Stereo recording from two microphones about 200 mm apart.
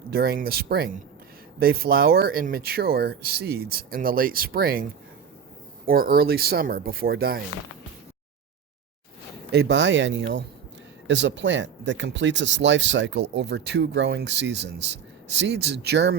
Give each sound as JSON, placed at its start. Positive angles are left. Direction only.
{"t": 0.1, "sound": "speech", "side_deg": -50}
{"t": 9.5, "sound": "speech", "side_deg": -60}